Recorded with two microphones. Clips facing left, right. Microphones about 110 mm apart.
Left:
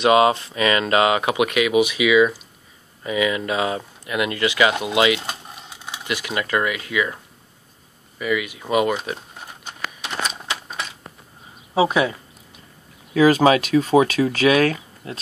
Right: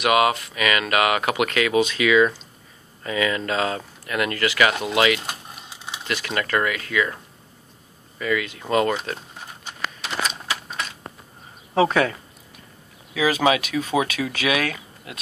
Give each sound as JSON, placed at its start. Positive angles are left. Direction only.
{"t": 0.0, "sound": "speech", "side_deg": 25}
{"t": 8.2, "sound": "speech", "side_deg": 15}
{"t": 10.2, "sound": "typewriter", "side_deg": 10}
{"t": 11.7, "sound": "speech", "side_deg": 15}
{"t": 13.1, "sound": "speech", "side_deg": 45}